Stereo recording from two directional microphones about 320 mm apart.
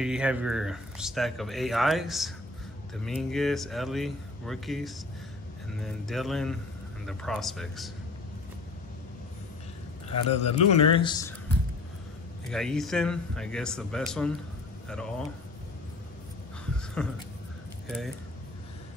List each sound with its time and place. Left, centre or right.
0.0 s speech: centre
10.4 s a man's voice: centre
12.4 s speech: centre
17.0 s speech: centre